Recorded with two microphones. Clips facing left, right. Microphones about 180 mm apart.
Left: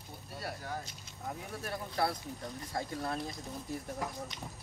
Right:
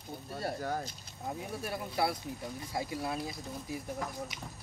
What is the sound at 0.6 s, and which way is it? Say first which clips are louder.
Speech: right 6 dB; 40° right (ahead or behind).